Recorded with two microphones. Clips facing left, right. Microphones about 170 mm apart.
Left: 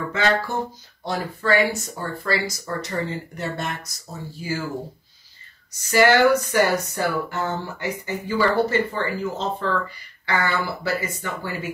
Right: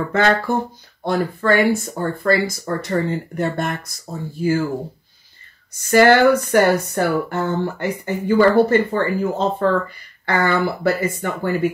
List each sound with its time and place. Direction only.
0.5 s speech: 55° right (ahead or behind)
5.8 s speech: 55° right (ahead or behind)